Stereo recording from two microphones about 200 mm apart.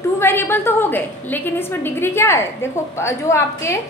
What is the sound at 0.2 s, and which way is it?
A woman's voice, 10° left (ahead or behind).